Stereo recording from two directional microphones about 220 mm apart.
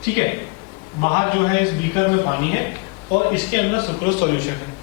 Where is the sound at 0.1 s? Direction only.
15° left (ahead or behind).